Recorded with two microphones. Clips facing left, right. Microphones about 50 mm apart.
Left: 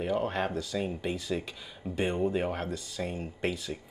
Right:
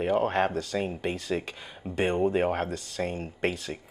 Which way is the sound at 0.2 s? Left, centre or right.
Right.